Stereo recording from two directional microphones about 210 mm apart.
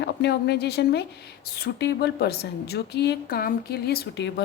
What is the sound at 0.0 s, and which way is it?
A woman's voice, 55° left (ahead or behind).